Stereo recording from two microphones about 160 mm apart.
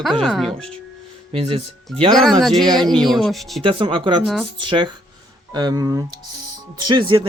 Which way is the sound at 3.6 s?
35° right (ahead or behind).